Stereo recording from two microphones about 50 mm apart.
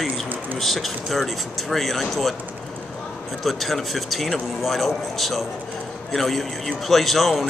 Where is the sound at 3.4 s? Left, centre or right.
Centre.